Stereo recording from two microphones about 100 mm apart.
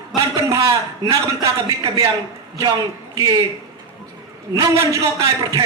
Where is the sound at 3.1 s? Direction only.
35° right (ahead or behind).